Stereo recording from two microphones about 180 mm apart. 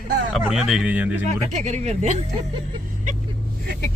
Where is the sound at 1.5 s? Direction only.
40° right (ahead or behind).